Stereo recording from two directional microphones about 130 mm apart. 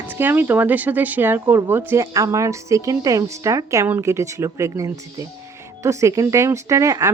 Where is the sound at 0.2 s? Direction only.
15° right (ahead or behind).